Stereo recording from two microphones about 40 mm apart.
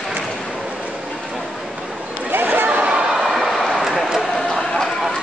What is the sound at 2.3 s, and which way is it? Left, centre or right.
Chatter, right.